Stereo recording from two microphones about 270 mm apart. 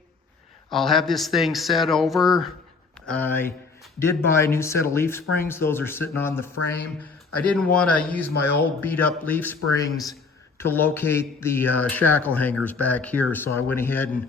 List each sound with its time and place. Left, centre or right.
0.7 s speech: centre